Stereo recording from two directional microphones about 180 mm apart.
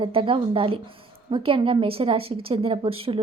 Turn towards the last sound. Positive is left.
turn(degrees=-30)  # may be behind; listen again after turning